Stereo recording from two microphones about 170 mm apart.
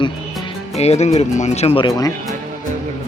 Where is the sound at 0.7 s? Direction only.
40° left (ahead or behind).